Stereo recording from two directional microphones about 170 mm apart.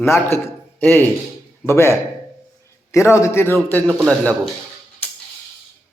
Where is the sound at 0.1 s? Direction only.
15° left (ahead or behind).